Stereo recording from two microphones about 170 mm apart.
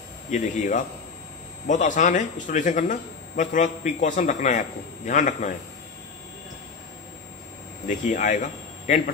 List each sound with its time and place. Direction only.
0.3 s speech: 45° left (ahead or behind)
7.9 s a man's voice: 45° left (ahead or behind)